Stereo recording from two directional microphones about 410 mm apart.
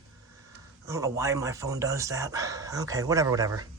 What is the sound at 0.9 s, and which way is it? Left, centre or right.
Speech, centre.